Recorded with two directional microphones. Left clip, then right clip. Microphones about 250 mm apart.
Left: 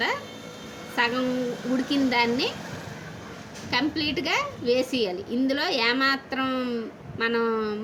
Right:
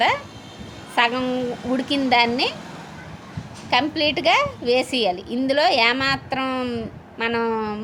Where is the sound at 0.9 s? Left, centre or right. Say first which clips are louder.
Right 5 dB; right.